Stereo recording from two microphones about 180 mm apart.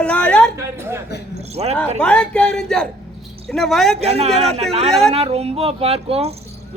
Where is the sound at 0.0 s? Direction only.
5° left (ahead or behind).